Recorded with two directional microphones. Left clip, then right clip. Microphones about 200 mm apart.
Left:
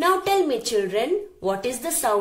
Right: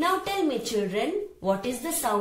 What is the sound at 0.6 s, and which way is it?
Speech, 30° left (ahead or behind).